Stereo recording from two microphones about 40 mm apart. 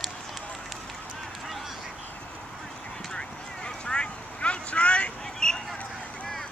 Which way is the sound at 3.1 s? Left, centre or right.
Left.